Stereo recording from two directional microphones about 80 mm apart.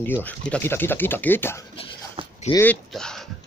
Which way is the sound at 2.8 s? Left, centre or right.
Centre.